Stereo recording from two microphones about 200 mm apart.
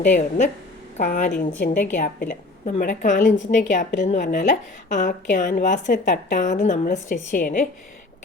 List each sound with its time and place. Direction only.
0.2 s a woman's voice: 35° left (ahead or behind)